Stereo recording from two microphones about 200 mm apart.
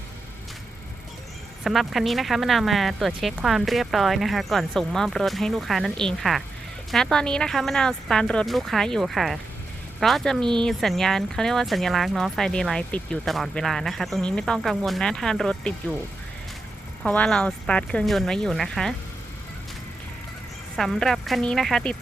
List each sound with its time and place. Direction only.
1.6 s speech: centre (ahead or behind)
17.0 s speech: 5° left (ahead or behind)
20.7 s speech: centre (ahead or behind)